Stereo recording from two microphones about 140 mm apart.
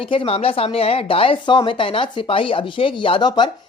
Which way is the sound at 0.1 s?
40° left (ahead or behind).